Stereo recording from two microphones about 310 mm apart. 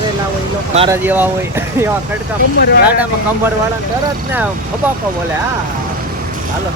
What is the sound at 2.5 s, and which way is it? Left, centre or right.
Speech, left.